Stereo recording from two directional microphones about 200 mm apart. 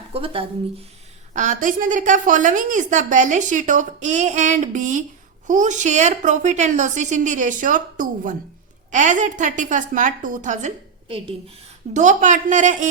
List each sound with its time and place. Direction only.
0.1 s speech: 30° right (ahead or behind)
1.3 s a woman's voice: 40° right (ahead or behind)
11.1 s speech: 25° right (ahead or behind)
11.9 s a woman's voice: 40° right (ahead or behind)